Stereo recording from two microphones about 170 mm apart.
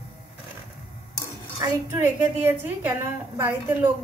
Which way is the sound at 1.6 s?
15° right (ahead or behind).